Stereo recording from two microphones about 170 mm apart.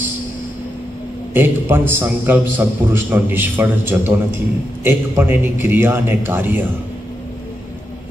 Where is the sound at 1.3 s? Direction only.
15° right (ahead or behind).